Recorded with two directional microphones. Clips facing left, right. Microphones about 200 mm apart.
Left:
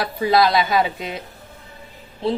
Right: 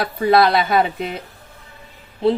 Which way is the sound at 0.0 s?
55° right (ahead or behind).